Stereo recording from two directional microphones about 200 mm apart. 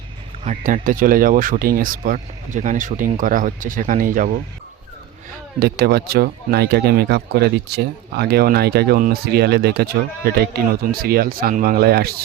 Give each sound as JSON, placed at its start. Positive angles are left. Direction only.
{"t": 0.4, "sound": "speech", "side_deg": -40}
{"t": 5.5, "sound": "speech", "side_deg": -50}